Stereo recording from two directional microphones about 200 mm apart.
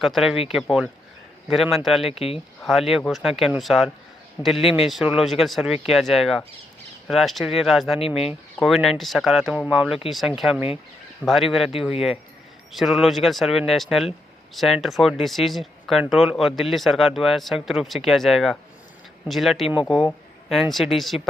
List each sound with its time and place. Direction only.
0.0 s speech: centre (ahead or behind)
2.1 s speech: 30° left (ahead or behind)
2.6 s speech: centre (ahead or behind)